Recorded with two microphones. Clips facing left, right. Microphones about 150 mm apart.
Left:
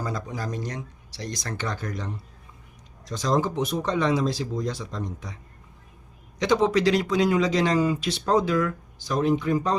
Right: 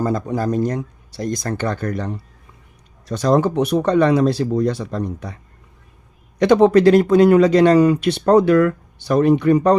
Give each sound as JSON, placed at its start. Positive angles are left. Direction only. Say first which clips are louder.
{"t": 0.0, "sound": "speech", "louder": "right 11 dB", "side_deg": -50}
{"t": 6.4, "sound": "speech", "louder": "right 9 dB", "side_deg": -60}